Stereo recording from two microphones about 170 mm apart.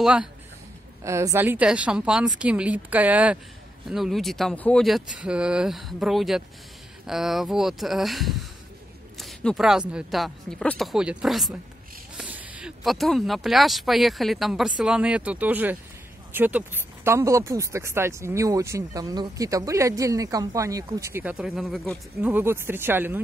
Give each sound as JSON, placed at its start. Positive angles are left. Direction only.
{"t": 0.0, "sound": "speech", "side_deg": -5}
{"t": 1.0, "sound": "speech", "side_deg": -15}
{"t": 22.3, "sound": "speech", "side_deg": -15}